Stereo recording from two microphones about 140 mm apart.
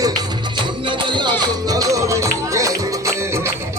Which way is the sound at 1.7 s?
25° right (ahead or behind).